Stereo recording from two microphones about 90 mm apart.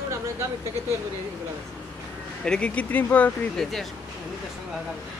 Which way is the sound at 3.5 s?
5° left (ahead or behind).